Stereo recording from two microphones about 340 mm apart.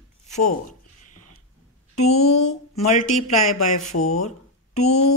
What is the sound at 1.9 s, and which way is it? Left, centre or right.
Speech, centre.